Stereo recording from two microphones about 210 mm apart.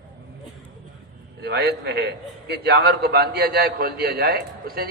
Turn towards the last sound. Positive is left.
turn(degrees=-50)  # may be behind; listen again after turning